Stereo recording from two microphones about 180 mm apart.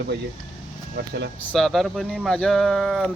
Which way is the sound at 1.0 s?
75° right (ahead or behind).